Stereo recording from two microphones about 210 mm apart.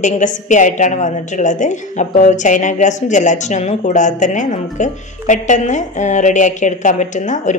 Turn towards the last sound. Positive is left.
turn(degrees=35)  # may be behind; listen again after turning